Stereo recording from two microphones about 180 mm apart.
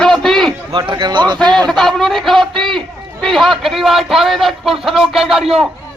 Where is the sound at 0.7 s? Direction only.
25° right (ahead or behind).